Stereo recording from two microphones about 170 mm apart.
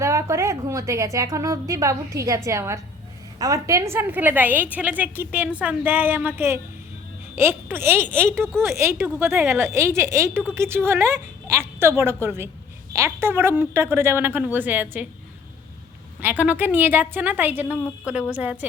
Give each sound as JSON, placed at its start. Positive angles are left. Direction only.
{"t": 0.0, "sound": "a woman's voice", "side_deg": -15}
{"t": 16.2, "sound": "a woman's voice", "side_deg": -10}